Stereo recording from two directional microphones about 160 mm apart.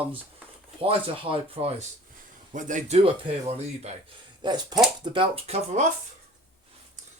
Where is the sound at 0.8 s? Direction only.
35° right (ahead or behind).